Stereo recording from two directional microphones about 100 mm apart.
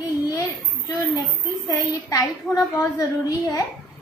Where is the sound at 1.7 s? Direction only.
35° left (ahead or behind).